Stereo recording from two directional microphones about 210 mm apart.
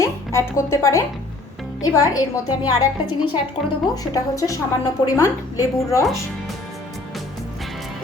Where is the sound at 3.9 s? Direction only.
15° left (ahead or behind).